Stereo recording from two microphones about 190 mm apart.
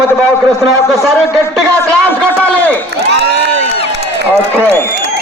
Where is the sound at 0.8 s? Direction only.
Centre (ahead or behind).